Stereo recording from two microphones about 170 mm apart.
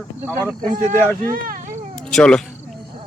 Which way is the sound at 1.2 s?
55° right (ahead or behind).